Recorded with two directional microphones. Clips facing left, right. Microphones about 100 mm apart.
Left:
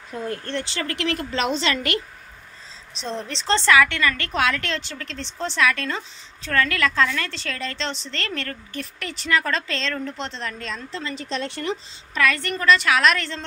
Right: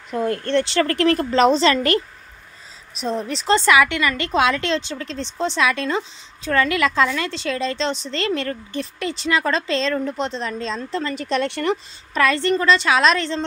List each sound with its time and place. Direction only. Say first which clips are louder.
0.1 s speech: right 8 dB; 70° right (ahead or behind)
0.8 s a woman's voice: right 8 dB; 40° right (ahead or behind)
2.9 s a woman's voice: right 6 dB; 5° right (ahead or behind); by 10.8 s 20° right (ahead or behind)
10.8 s speech: right 6 dB; 45° right (ahead or behind); by 11.8 s 65° right (ahead or behind)
12.1 s a woman's voice: right 5 dB; 30° right (ahead or behind)